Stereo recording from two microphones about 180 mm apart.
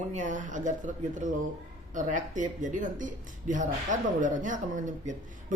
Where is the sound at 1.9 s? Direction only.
45° right (ahead or behind).